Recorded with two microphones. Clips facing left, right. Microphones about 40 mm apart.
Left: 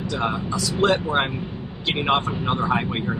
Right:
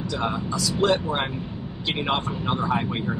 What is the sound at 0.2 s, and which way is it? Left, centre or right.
Speech, left.